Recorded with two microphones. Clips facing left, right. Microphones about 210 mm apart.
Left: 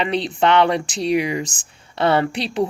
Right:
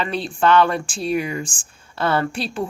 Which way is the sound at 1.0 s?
80° left.